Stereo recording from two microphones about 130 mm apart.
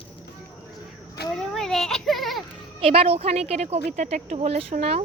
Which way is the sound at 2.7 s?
50° right (ahead or behind).